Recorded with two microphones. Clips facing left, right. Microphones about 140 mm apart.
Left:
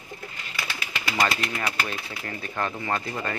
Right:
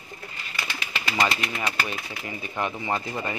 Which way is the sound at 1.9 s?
10° right (ahead or behind).